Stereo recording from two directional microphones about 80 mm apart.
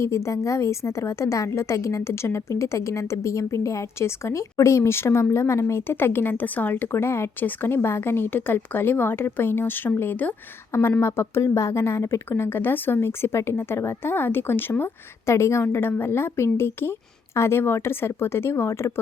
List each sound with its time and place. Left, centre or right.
0.0 s a woman's voice: left